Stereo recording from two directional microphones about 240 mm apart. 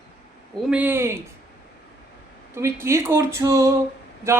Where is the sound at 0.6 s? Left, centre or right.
Centre.